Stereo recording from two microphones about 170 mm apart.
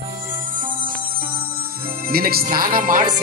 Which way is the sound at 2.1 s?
65° right (ahead or behind).